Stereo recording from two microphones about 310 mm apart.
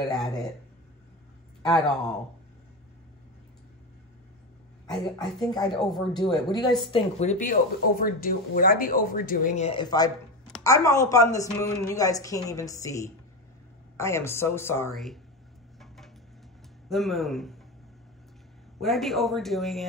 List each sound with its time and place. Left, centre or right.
1.6 s speech: centre
4.9 s speech: centre
6.1 s a woman's voice: centre
16.9 s speech: centre
18.8 s speech: centre